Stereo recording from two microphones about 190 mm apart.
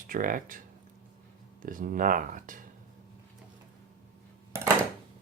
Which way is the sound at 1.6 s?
45° right (ahead or behind).